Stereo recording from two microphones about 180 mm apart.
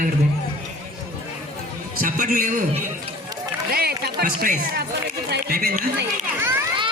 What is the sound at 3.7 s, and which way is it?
Speech, 55° right (ahead or behind).